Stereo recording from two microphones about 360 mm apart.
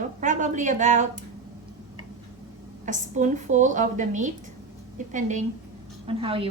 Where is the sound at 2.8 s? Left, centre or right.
Right.